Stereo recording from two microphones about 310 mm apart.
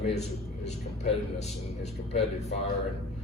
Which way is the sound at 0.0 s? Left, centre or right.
Left.